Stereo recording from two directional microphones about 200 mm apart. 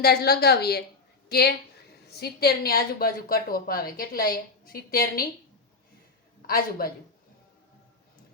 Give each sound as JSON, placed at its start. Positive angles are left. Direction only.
{"t": 0.0, "sound": "a woman's voice", "side_deg": 50}
{"t": 6.5, "sound": "a woman's voice", "side_deg": 50}